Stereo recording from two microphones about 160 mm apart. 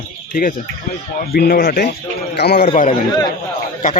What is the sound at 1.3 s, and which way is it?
Speech, 70° left (ahead or behind).